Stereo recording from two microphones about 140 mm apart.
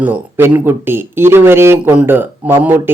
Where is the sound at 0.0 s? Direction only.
15° right (ahead or behind).